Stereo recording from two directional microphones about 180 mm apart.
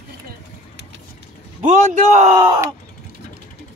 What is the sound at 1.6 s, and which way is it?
Speech, 45° right (ahead or behind).